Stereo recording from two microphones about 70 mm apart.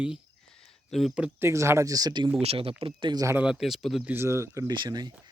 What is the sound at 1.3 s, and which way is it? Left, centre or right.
Speech, right.